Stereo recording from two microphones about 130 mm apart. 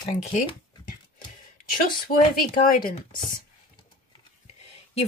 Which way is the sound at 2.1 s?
90° left.